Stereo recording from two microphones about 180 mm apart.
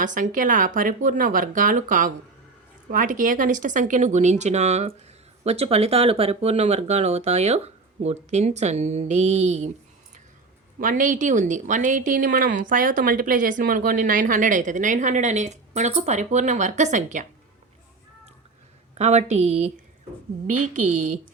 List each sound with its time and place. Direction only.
0.0 s speech: 45° right (ahead or behind)
10.8 s speech: 45° right (ahead or behind)
18.9 s speech: 40° right (ahead or behind)